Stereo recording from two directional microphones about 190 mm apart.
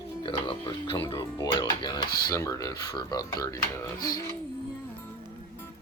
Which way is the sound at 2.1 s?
55° left (ahead or behind).